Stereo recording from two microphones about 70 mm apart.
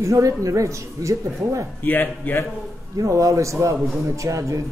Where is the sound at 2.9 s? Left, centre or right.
Right.